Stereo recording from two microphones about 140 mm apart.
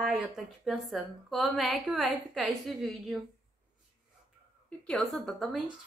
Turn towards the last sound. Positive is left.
turn(degrees=0)  # may be behind; listen again after turning